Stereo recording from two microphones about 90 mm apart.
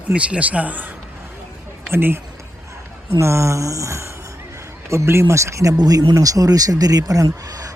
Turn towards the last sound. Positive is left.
turn(degrees=-40)  # may be behind; listen again after turning